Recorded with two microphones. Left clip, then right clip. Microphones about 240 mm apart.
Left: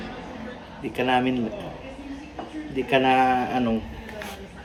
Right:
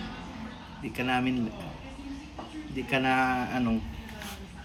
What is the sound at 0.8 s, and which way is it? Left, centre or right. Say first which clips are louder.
Speech: left 7 dB; centre.